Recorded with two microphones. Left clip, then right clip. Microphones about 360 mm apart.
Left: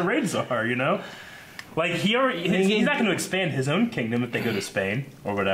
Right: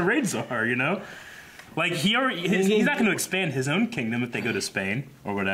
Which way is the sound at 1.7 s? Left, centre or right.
Left.